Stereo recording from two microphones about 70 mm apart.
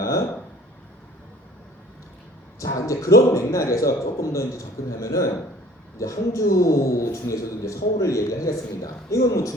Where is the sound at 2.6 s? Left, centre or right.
Left.